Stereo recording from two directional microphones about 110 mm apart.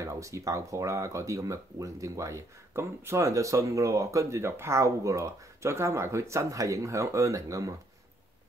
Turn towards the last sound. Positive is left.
turn(degrees=-30)  # may be behind; listen again after turning